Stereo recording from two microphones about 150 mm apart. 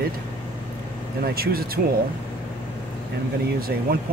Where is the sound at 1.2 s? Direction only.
90° right.